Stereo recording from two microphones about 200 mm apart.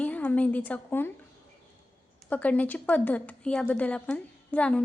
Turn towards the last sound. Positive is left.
turn(degrees=5)  # may be behind; listen again after turning